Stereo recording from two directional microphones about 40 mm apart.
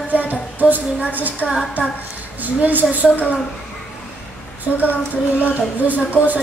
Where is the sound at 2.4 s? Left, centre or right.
Right.